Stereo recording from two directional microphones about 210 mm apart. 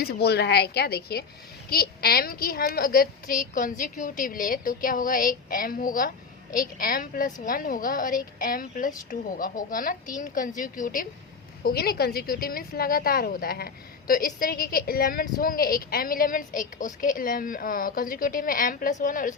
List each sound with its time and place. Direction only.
0.0 s a woman's voice: 50° left (ahead or behind)